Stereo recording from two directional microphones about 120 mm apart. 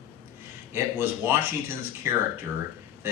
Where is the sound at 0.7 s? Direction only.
20° right (ahead or behind).